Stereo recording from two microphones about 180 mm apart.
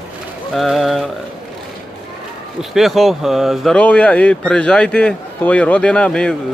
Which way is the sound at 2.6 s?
Centre (ahead or behind).